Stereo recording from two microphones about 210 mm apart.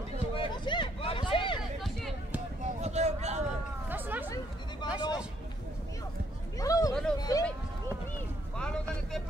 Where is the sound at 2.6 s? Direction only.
30° right (ahead or behind).